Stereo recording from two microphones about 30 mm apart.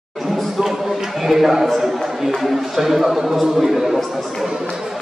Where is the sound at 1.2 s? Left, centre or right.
Centre.